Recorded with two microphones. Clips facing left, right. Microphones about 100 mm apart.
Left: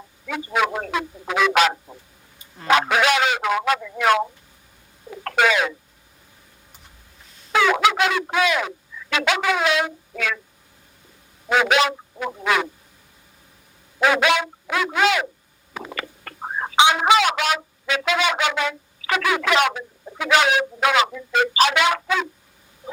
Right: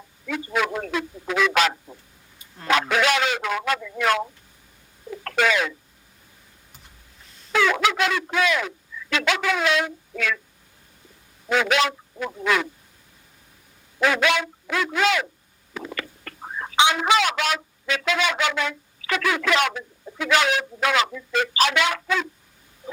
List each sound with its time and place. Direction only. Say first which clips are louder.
0.3 s speech: left 2 dB; 15° left (ahead or behind)
0.9 s fowl: left 1 dB; 15° left (ahead or behind)
2.9 s speech: left 2 dB; 15° left (ahead or behind)
5.4 s speech: left 2 dB; 15° left (ahead or behind)
7.5 s speech: left 3 dB; 15° left (ahead or behind)
11.4 s a man's voice: left 3 dB; 15° left (ahead or behind)
14.0 s speech: left 2 dB; 15° left (ahead or behind)
15.7 s a sound: left 1 dB; 20° left (ahead or behind)
16.2 s chicken: left 5 dB; 35° left (ahead or behind)
16.7 s speech: left 3 dB; 15° left (ahead or behind)